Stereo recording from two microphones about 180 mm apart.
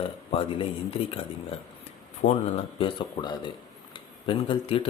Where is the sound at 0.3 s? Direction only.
30° left (ahead or behind).